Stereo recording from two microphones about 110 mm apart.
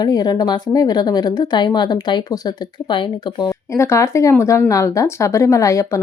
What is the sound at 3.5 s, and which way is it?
Speech, 25° left (ahead or behind).